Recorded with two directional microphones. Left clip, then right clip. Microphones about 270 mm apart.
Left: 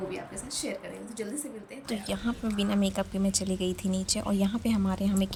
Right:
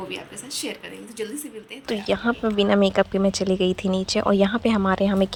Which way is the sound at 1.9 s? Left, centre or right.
Centre.